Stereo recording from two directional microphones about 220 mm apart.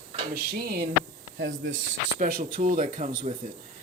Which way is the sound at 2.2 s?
40° right (ahead or behind).